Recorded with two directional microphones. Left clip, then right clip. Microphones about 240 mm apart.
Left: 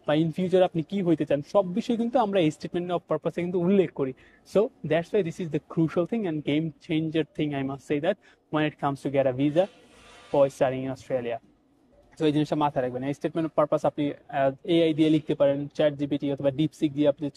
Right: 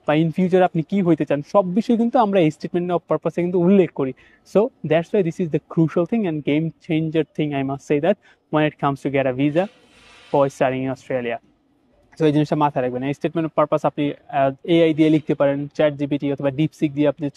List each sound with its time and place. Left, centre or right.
0.0 s speech: right